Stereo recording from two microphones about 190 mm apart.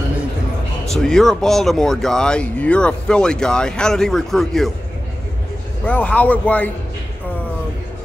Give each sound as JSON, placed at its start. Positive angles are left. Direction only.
{"t": 0.8, "sound": "speech", "side_deg": 0}
{"t": 5.9, "sound": "speech", "side_deg": 10}